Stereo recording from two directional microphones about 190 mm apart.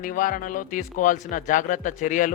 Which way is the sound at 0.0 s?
45° left (ahead or behind).